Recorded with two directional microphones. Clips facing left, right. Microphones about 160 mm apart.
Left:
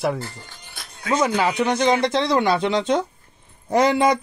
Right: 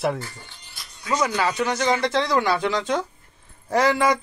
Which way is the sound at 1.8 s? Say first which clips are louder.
Left 2 dB; 20° left (ahead or behind).